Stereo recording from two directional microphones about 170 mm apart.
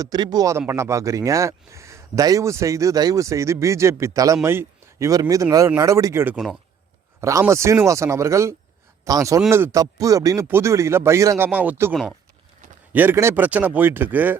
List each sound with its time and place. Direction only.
0.0 s speech: 25° right (ahead or behind)
6.3 s speech: 5° right (ahead or behind)
7.2 s speech: 15° right (ahead or behind)